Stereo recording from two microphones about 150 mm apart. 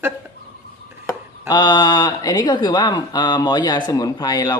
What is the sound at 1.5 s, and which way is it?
Speech, 30° left (ahead or behind).